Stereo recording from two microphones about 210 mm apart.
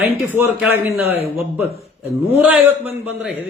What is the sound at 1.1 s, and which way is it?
Speech, 30° left (ahead or behind).